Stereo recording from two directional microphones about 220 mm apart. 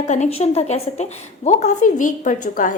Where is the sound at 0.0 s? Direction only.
30° left (ahead or behind).